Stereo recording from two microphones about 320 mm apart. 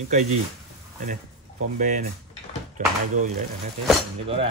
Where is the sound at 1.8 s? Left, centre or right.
Right.